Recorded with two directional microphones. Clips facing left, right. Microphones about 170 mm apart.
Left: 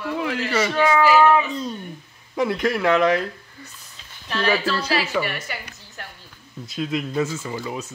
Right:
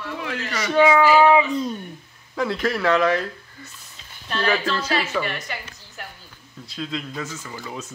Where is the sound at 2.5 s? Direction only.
Centre (ahead or behind).